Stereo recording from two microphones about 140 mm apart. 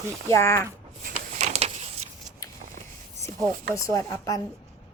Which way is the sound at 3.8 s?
25° left (ahead or behind).